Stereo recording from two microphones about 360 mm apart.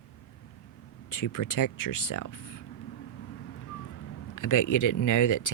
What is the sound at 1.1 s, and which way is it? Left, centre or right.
Speech, left.